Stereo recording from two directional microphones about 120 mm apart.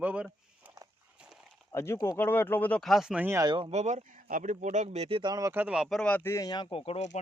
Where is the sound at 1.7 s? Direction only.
20° left (ahead or behind).